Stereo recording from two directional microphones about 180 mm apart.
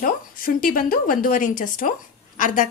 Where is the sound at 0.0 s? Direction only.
50° left (ahead or behind).